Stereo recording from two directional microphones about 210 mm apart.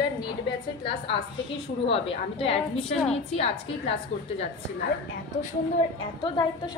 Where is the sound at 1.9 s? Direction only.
25° left (ahead or behind).